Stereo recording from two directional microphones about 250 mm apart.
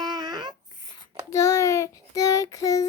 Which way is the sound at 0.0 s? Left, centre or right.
Centre.